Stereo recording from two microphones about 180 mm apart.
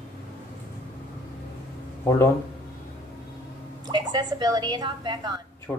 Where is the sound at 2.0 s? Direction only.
15° left (ahead or behind).